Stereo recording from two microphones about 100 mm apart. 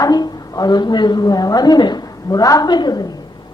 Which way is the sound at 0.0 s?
40° left (ahead or behind).